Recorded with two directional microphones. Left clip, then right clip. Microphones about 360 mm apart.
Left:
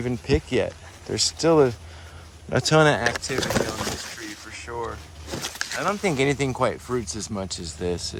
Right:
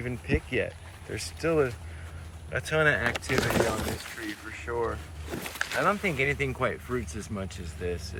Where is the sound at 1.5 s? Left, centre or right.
Left.